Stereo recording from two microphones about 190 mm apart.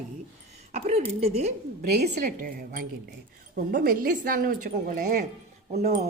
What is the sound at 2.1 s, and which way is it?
A woman's voice, 45° right (ahead or behind).